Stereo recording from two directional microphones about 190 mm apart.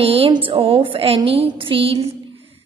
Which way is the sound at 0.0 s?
30° right (ahead or behind).